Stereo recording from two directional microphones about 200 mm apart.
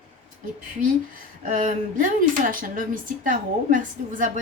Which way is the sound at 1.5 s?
40° right (ahead or behind).